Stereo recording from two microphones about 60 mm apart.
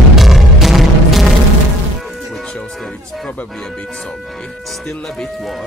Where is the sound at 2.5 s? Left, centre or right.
Centre.